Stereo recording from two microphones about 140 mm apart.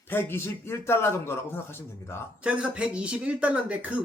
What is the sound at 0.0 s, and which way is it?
A man's voice, 15° left (ahead or behind).